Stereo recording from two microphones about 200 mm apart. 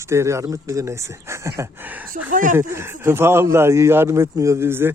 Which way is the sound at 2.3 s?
40° right (ahead or behind).